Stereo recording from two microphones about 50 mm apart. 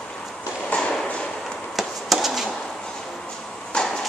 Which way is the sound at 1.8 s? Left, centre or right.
Centre.